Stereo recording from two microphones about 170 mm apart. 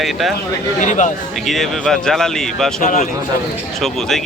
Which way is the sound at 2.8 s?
45° left (ahead or behind).